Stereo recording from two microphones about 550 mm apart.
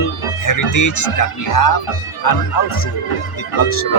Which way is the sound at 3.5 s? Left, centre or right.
Left.